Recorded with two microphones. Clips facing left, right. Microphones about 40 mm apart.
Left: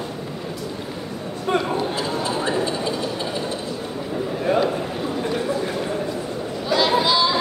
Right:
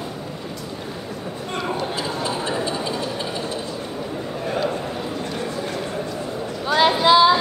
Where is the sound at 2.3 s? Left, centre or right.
Centre.